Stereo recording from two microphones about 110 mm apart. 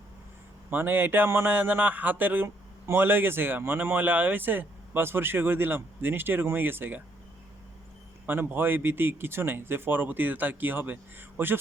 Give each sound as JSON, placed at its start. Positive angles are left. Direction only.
{"t": 0.7, "sound": "speech", "side_deg": -20}
{"t": 8.3, "sound": "speech", "side_deg": -20}